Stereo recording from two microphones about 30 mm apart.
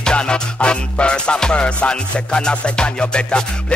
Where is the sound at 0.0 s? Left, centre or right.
Left.